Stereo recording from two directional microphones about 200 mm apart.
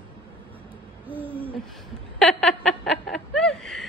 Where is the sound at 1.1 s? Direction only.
10° right (ahead or behind).